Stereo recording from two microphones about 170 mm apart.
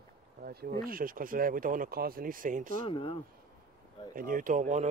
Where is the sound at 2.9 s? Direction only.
30° left (ahead or behind).